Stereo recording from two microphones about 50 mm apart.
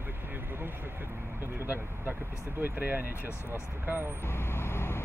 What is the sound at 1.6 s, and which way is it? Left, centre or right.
Speech, right.